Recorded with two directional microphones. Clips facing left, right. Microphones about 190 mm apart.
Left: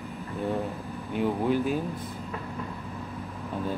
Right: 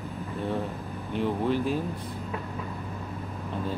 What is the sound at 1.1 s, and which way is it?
Speech, 5° left (ahead or behind).